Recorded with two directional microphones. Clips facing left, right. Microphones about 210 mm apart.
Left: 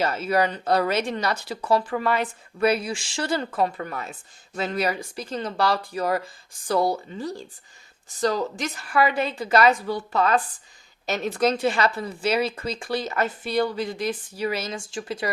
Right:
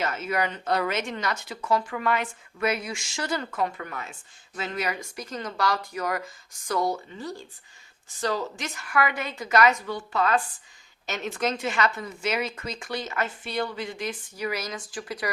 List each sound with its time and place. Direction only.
0.0 s speech: 35° left (ahead or behind)